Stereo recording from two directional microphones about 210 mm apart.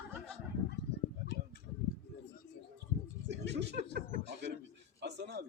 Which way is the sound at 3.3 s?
55° right (ahead or behind).